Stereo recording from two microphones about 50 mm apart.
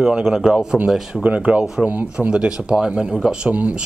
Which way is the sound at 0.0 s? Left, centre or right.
Centre.